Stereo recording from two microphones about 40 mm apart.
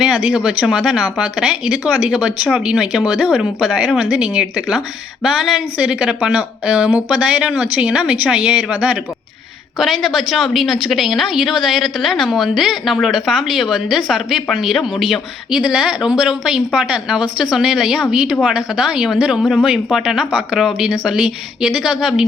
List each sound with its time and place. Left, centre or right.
0.0 s speech: centre
9.7 s a woman's voice: centre
15.4 s a woman's voice: centre
20.6 s a woman's voice: centre
21.0 s a woman's voice: centre